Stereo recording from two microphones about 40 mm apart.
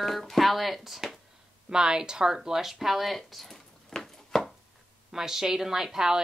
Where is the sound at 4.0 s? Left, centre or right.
Centre.